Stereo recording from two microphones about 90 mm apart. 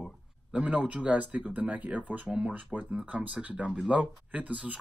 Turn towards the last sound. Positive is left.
turn(degrees=-15)  # may be behind; listen again after turning